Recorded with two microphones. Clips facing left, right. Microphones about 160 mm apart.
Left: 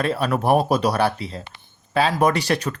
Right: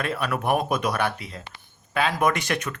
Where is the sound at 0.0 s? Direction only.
30° left (ahead or behind).